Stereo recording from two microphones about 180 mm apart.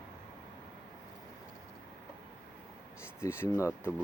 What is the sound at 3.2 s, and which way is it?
Speech, 15° left (ahead or behind).